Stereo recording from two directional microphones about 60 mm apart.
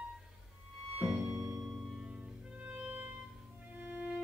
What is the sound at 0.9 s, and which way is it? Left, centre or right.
Music, centre.